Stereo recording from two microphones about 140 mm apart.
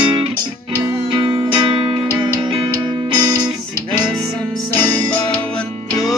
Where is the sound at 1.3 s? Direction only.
35° right (ahead or behind).